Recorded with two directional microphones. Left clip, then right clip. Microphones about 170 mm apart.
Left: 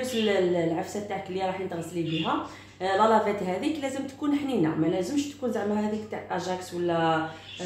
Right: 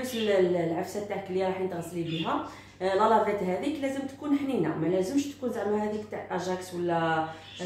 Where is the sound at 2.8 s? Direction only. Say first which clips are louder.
Left 1 dB; 50° left (ahead or behind).